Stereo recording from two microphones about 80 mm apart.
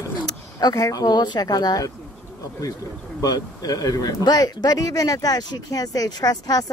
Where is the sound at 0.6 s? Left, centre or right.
Left.